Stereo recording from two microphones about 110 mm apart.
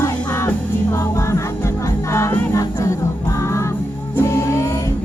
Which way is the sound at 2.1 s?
25° left (ahead or behind).